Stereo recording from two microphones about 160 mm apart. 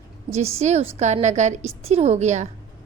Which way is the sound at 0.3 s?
40° right (ahead or behind).